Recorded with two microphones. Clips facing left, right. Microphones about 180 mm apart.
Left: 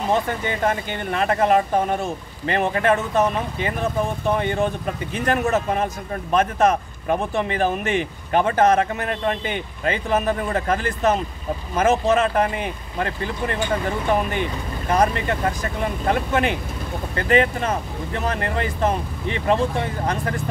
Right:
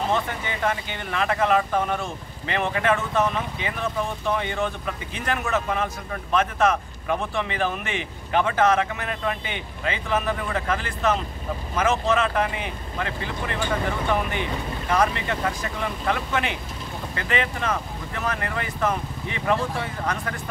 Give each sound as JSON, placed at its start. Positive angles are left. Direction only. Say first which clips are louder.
{"t": 0.1, "sound": "speech", "louder": "left 4 dB", "side_deg": 40}